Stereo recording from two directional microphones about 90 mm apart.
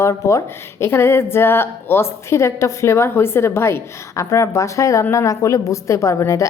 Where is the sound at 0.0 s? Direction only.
35° left (ahead or behind).